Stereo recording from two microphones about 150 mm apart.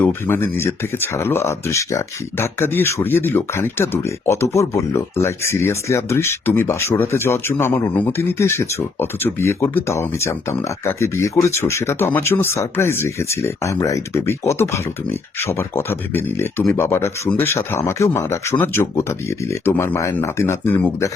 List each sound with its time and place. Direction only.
0.0 s speech: 15° left (ahead or behind)